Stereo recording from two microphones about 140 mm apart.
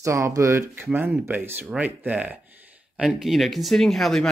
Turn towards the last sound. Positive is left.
turn(degrees=0)  # may be behind; listen again after turning